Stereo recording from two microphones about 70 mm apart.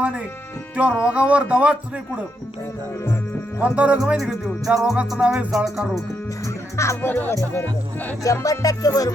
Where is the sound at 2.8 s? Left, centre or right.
Left.